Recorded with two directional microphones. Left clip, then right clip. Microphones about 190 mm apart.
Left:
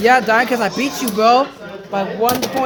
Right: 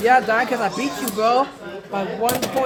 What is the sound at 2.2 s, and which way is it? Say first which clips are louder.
Speech: left 4 dB; 45° left (ahead or behind).